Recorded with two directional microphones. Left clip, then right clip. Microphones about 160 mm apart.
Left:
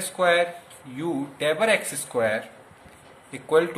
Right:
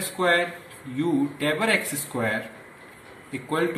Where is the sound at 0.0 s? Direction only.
55° left (ahead or behind).